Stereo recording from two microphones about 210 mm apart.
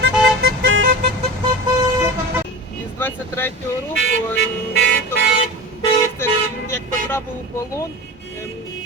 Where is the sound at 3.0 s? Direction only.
10° left (ahead or behind).